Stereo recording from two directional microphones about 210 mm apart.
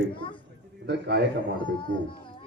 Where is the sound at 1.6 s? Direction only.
25° left (ahead or behind).